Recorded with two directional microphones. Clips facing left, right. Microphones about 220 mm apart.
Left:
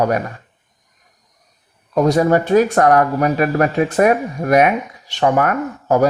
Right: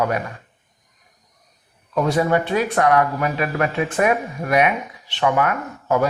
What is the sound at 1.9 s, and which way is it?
Speech, 40° left (ahead or behind).